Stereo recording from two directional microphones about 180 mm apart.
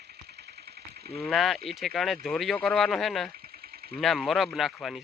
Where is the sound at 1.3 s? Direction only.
Centre (ahead or behind).